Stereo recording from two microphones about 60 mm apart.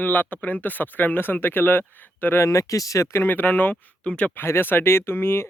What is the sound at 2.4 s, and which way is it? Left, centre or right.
Speech, left.